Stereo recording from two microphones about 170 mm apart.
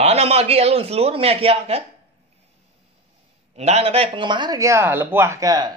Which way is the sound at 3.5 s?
40° right (ahead or behind).